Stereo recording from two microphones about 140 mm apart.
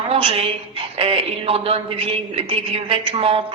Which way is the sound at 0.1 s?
45° right (ahead or behind).